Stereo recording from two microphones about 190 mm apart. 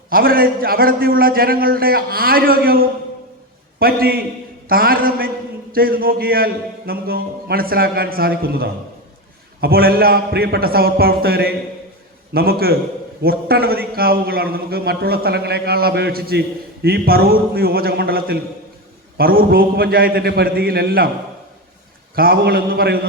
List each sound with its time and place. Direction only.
0.1 s a man's voice: 50° right (ahead or behind)
22.1 s a man's voice: 55° right (ahead or behind)